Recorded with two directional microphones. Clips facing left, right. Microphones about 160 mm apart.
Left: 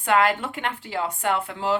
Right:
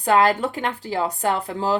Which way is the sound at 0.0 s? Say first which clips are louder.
Right 3 dB; 35° right (ahead or behind).